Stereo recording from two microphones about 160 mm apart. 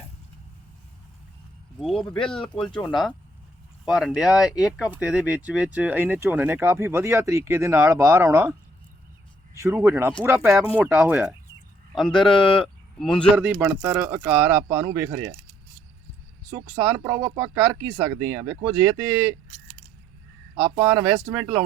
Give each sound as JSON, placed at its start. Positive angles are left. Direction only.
{"t": 1.8, "sound": "speech", "side_deg": 0}
{"t": 3.8, "sound": "speech", "side_deg": 0}
{"t": 9.6, "sound": "speech", "side_deg": -15}
{"t": 12.4, "sound": "speech", "side_deg": 35}
{"t": 12.6, "sound": "speech", "side_deg": 5}
{"t": 13.3, "sound": "speech", "side_deg": -10}
{"t": 16.5, "sound": "speech", "side_deg": -20}
{"t": 20.7, "sound": "speech", "side_deg": -15}